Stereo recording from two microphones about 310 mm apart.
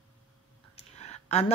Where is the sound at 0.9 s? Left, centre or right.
Left.